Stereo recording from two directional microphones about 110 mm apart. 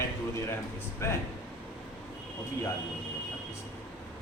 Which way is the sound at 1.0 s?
25° left (ahead or behind).